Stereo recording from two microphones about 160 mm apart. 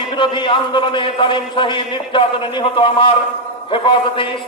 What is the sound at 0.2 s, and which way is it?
A man's voice, 30° left (ahead or behind).